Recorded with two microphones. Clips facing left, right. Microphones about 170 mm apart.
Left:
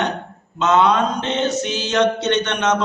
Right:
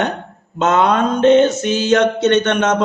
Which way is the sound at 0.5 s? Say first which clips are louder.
Right 1 dB; 50° right (ahead or behind).